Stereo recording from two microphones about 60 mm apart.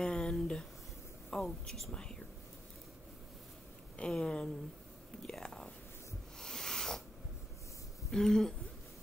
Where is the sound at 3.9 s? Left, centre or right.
Centre.